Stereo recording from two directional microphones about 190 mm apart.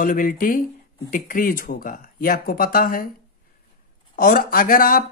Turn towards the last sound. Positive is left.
turn(degrees=45)  # may be behind; listen again after turning